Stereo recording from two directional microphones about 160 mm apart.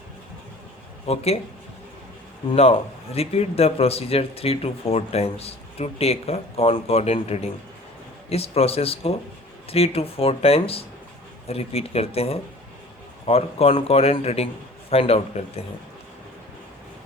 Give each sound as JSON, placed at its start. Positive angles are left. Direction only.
{"t": 1.0, "sound": "speech", "side_deg": 40}
{"t": 2.6, "sound": "speech", "side_deg": 40}